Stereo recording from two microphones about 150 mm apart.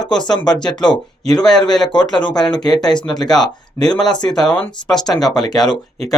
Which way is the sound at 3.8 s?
5° left (ahead or behind).